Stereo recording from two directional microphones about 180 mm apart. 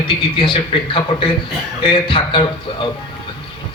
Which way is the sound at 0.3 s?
30° left (ahead or behind).